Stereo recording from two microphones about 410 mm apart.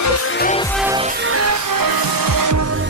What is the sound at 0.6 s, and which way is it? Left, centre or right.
Music, centre.